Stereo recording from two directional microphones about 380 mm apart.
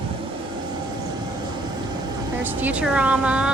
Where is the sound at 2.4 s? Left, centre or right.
Centre.